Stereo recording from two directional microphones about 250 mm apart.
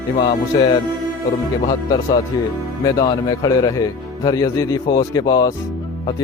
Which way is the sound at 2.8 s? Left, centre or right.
Centre.